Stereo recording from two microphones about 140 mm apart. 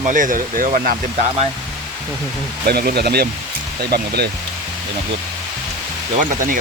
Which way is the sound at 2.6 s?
90° right.